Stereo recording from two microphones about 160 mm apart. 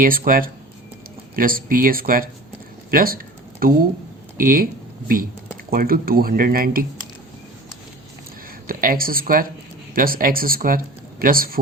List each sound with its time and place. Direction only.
0.0 s speech: 60° right (ahead or behind)
8.6 s speech: 65° right (ahead or behind)